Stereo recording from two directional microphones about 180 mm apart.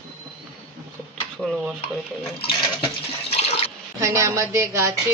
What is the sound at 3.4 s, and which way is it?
Water, 35° left (ahead or behind).